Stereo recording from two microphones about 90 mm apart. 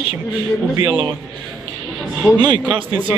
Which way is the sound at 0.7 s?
50° right (ahead or behind).